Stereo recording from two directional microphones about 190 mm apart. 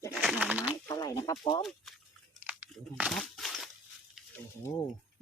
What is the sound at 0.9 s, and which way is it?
Speech, 15° left (ahead or behind).